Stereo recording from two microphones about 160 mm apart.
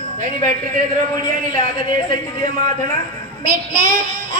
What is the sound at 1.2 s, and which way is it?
Speech, 50° right (ahead or behind).